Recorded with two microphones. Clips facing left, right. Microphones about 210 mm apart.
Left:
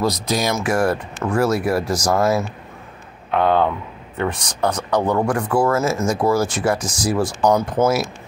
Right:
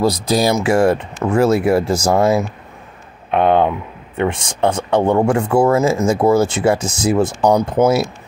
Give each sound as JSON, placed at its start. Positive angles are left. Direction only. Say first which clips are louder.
{"t": 0.0, "sound": "speech", "louder": "right 5 dB", "side_deg": -30}